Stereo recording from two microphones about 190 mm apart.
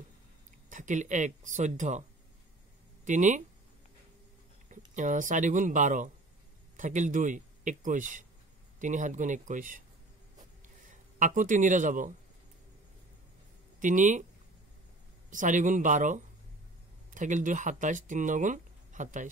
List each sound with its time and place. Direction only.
0.7 s speech: 40° right (ahead or behind)
3.1 s speech: 40° right (ahead or behind)
4.6 s speech: 40° right (ahead or behind)
10.9 s a man's voice: 40° right (ahead or behind)
13.7 s speech: 40° right (ahead or behind)
15.2 s speech: 40° right (ahead or behind)